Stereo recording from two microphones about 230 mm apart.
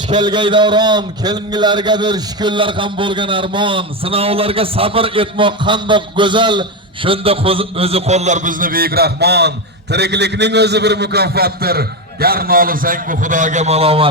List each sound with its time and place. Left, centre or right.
0.1 s a man's voice: centre